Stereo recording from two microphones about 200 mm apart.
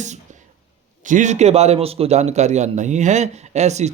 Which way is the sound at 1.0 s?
40° right (ahead or behind).